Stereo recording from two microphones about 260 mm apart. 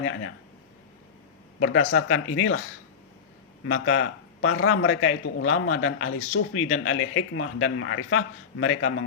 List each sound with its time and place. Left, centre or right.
0.0 s speech: left
1.5 s speech: left
3.7 s speech: left